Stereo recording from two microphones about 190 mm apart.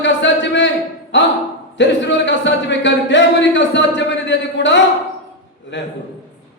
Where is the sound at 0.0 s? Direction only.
70° left (ahead or behind).